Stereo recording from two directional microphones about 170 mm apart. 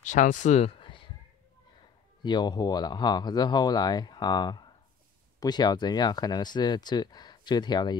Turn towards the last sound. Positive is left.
turn(degrees=25)  # may be behind; listen again after turning